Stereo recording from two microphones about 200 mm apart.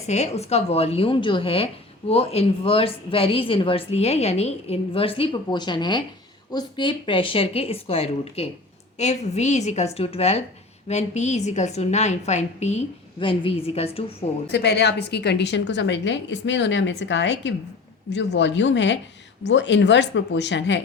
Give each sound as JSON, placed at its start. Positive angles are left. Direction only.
{"t": 0.1, "sound": "a woman's voice", "side_deg": 35}
{"t": 14.4, "sound": "a woman's voice", "side_deg": 55}